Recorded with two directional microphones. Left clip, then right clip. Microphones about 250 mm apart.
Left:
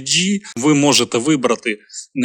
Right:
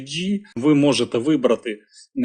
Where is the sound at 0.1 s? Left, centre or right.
Left.